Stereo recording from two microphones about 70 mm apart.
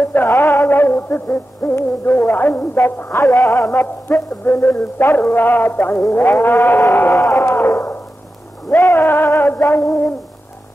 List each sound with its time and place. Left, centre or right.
0.0 s music: left
3.7 s music: left
7.2 s a sound: left
8.9 s music: left